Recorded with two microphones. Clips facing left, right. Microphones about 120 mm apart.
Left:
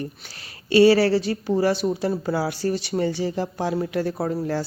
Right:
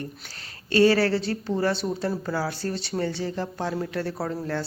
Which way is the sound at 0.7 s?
10° left (ahead or behind).